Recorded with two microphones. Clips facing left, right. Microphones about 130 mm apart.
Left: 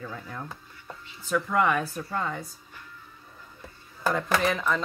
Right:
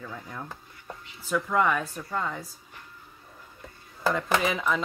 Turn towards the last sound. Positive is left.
turn(degrees=-5)  # may be behind; listen again after turning